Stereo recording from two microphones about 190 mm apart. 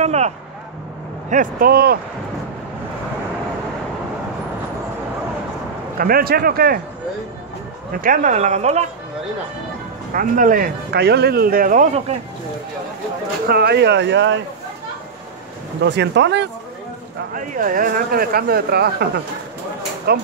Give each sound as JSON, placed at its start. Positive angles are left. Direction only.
{"t": 0.0, "sound": "vehicle", "side_deg": -35}
{"t": 1.3, "sound": "speech", "side_deg": -45}
{"t": 5.9, "sound": "speech", "side_deg": -50}
{"t": 7.9, "sound": "speech", "side_deg": -45}
{"t": 10.1, "sound": "speech", "side_deg": -45}
{"t": 13.5, "sound": "speech", "side_deg": -60}
{"t": 15.8, "sound": "speech", "side_deg": -65}
{"t": 17.3, "sound": "speech", "side_deg": -45}